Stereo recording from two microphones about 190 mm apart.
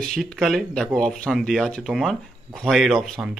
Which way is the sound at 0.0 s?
Centre (ahead or behind).